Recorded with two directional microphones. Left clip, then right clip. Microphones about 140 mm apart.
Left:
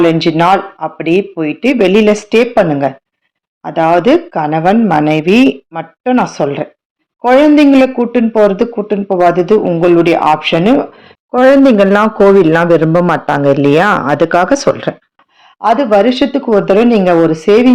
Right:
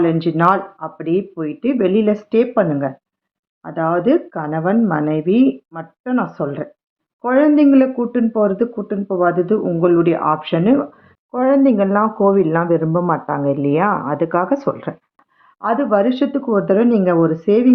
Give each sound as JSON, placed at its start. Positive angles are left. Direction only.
{"t": 0.0, "sound": "speech", "side_deg": 40}
{"t": 11.3, "sound": "speech", "side_deg": 65}
{"t": 15.6, "sound": "speech", "side_deg": 25}